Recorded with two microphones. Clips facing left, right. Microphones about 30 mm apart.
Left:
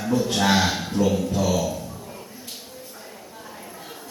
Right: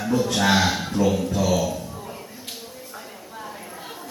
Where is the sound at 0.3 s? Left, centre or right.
Centre.